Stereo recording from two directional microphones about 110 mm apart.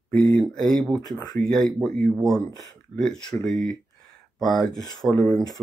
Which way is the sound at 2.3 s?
30° left (ahead or behind).